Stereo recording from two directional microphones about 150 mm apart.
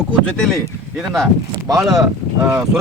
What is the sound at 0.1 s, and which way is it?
Speech, 5° left (ahead or behind).